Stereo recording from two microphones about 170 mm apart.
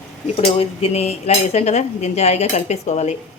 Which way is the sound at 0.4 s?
35° left (ahead or behind).